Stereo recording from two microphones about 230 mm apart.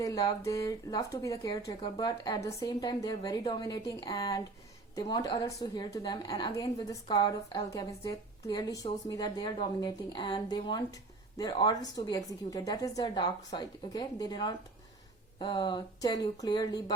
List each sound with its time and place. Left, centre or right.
0.0 s speech: centre